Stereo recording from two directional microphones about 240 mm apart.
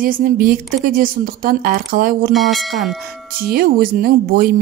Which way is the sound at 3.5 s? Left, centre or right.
Right.